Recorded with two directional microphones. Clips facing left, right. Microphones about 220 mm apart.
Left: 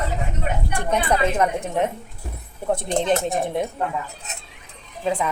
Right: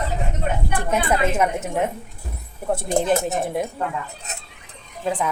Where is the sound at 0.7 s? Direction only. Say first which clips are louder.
Left 1 dB; 5° right (ahead or behind).